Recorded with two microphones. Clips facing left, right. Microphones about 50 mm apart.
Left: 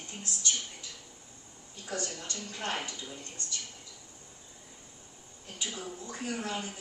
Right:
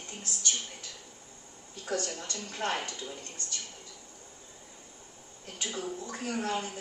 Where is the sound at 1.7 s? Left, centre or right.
Right.